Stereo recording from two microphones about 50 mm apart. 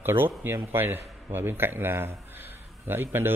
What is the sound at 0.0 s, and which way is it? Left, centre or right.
A man's voice, right.